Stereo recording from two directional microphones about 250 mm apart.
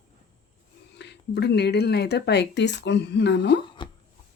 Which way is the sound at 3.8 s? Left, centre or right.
Centre.